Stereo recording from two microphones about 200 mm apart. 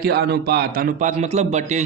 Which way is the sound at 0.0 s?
55° right (ahead or behind).